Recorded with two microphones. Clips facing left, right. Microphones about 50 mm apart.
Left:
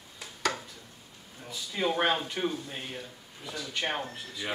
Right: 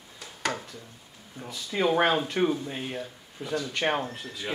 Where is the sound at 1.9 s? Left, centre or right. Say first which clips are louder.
Right 5 dB; centre.